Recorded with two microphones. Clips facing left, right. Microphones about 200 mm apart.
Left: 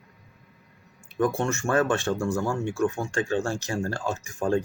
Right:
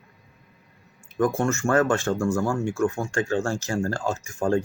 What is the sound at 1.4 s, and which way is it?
Speech, 15° left (ahead or behind).